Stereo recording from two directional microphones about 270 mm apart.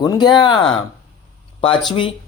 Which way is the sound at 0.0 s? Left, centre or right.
Centre.